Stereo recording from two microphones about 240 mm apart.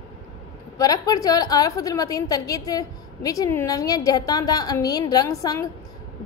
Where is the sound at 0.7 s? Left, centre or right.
Centre.